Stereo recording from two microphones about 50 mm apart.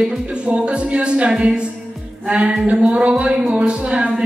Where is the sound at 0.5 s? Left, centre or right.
Right.